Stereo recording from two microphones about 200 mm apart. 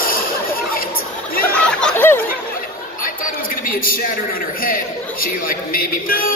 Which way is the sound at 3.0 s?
45° left (ahead or behind).